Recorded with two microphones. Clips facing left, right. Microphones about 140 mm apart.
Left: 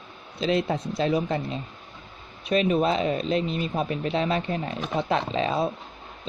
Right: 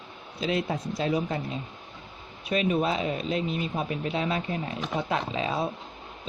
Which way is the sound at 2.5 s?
35° left (ahead or behind).